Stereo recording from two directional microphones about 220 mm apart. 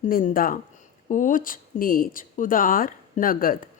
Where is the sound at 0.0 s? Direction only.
40° left (ahead or behind).